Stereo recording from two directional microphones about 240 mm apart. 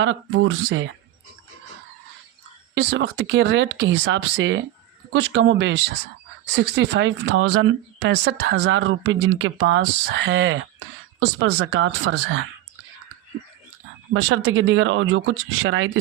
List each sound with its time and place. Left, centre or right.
0.0 s speech: right
2.7 s speech: right
14.1 s speech: right